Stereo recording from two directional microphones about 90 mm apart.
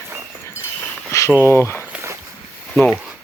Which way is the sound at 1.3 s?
25° left (ahead or behind).